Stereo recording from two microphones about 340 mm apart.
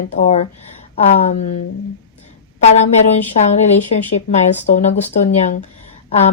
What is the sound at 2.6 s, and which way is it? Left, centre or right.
Speech, centre.